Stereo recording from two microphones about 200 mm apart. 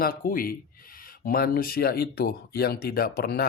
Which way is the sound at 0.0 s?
45° left (ahead or behind).